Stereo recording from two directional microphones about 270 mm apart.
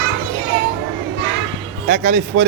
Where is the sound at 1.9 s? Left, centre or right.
Right.